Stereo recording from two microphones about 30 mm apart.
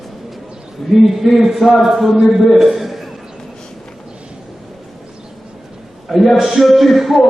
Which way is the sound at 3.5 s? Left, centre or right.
Left.